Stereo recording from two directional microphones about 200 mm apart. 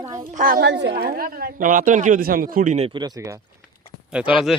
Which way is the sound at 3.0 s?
20° right (ahead or behind).